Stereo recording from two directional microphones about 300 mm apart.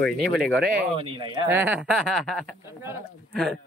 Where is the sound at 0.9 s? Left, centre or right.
Centre.